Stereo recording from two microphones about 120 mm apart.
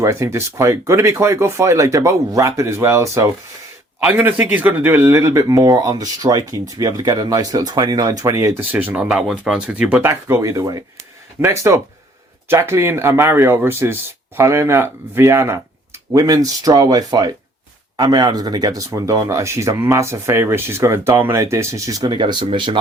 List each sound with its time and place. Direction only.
0.0 s speech: 25° right (ahead or behind)
4.0 s speech: 15° right (ahead or behind)
10.0 s speech: 20° right (ahead or behind); by 22.8 s 45° right (ahead or behind)